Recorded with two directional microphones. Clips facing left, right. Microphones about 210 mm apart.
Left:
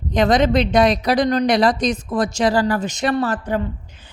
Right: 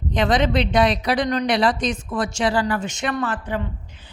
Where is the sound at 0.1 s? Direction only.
40° left (ahead or behind).